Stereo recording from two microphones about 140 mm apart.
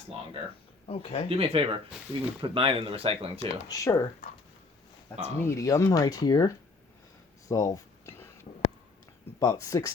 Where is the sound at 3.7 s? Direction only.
20° left (ahead or behind).